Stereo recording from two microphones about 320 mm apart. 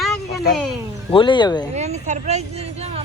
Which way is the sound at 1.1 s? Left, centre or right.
Centre.